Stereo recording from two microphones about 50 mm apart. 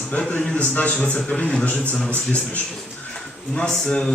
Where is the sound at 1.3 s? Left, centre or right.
Centre.